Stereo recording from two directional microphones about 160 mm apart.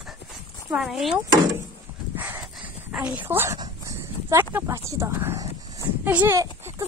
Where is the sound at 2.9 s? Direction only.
10° right (ahead or behind).